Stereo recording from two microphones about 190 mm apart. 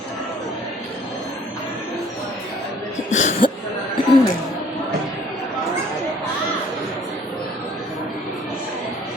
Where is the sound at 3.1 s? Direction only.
40° left (ahead or behind).